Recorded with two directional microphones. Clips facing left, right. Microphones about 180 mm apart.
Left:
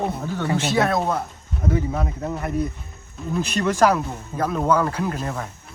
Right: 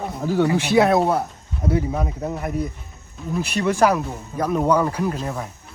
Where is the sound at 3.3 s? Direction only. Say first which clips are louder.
Right 1 dB; 10° right (ahead or behind).